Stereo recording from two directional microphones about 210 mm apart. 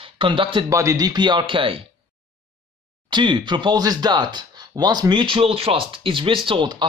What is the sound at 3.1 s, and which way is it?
Speech, 20° right (ahead or behind).